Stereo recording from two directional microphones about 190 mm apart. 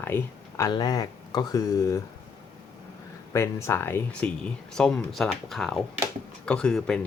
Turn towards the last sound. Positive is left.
turn(degrees=5)  # may be behind; listen again after turning